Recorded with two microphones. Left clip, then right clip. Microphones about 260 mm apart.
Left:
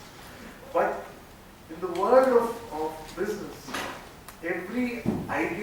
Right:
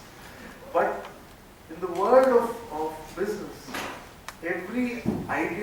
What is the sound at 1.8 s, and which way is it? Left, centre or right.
Speech, centre.